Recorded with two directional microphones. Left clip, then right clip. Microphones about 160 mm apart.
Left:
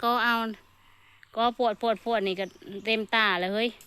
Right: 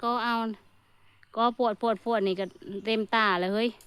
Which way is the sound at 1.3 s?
30° right (ahead or behind).